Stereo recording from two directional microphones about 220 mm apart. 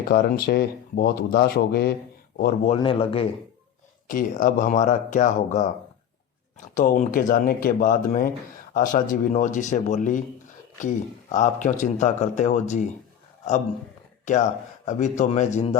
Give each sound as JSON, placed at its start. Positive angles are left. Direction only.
{"t": 0.1, "sound": "speech", "side_deg": 45}
{"t": 2.6, "sound": "speech", "side_deg": 25}
{"t": 4.0, "sound": "speech", "side_deg": 40}
{"t": 14.3, "sound": "speech", "side_deg": 35}